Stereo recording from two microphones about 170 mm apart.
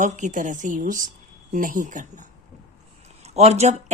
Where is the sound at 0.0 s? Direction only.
45° right (ahead or behind).